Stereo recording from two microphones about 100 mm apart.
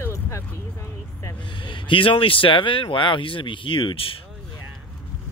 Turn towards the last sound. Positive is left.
turn(degrees=65)  # may be behind; listen again after turning